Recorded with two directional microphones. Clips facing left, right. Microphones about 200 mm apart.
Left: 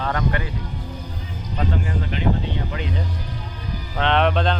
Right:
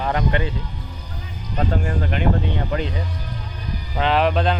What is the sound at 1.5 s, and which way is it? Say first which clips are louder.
Speech: right 2 dB; 50° right (ahead or behind).